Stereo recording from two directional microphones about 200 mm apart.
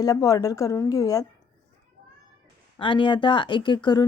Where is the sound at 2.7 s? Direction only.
25° left (ahead or behind).